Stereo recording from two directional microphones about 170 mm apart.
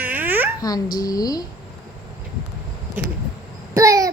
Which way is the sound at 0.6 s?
20° left (ahead or behind).